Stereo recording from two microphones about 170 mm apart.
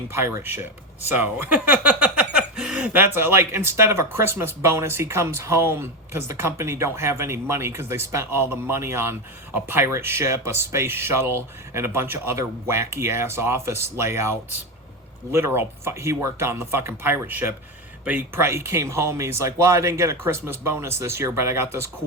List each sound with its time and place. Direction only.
0.1 s speech: 15° right (ahead or behind)